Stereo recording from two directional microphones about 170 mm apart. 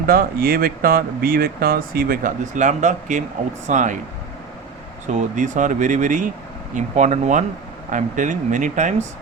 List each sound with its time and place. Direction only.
0.1 s speech: 60° right (ahead or behind)
5.0 s speech: 45° right (ahead or behind)